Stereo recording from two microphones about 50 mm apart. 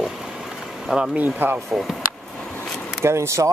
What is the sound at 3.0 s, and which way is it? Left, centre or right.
Speech, right.